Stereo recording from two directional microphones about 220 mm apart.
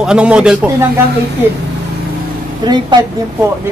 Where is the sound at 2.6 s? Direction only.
20° right (ahead or behind).